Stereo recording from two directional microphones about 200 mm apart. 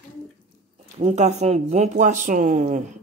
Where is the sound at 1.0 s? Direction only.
35° right (ahead or behind).